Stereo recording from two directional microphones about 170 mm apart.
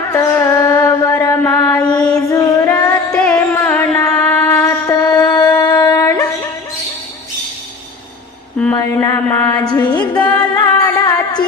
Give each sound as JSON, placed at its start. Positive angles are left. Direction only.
{"t": 0.1, "sound": "mantra", "side_deg": 15}
{"t": 3.1, "sound": "carnatic music", "side_deg": 5}
{"t": 3.3, "sound": "mantra", "side_deg": 10}
{"t": 5.6, "sound": "music", "side_deg": 25}
{"t": 8.5, "sound": "mantra", "side_deg": 10}
{"t": 9.5, "sound": "a sound", "side_deg": 25}
{"t": 10.1, "sound": "music", "side_deg": 25}